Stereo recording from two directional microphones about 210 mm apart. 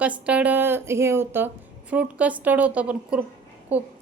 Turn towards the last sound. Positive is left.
turn(degrees=-10)  # may be behind; listen again after turning